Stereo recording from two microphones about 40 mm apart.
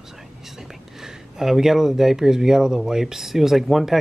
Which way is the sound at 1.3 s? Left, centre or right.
Centre.